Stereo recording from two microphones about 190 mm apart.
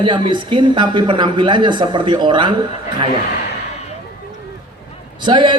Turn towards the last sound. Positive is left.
turn(degrees=-25)  # may be behind; listen again after turning